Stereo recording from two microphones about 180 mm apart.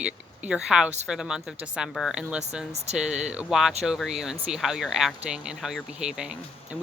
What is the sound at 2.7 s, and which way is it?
Speech, 35° right (ahead or behind).